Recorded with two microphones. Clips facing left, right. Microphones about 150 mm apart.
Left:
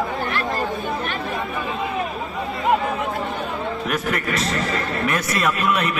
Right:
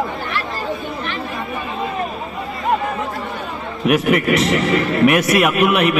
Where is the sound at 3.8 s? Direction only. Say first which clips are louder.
Right 12 dB; 70° right (ahead or behind).